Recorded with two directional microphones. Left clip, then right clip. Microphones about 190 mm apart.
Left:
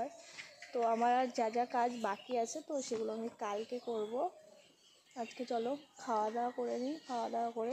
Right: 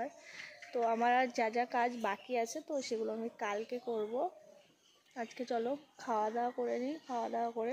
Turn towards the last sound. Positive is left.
turn(degrees=-15)  # may be behind; listen again after turning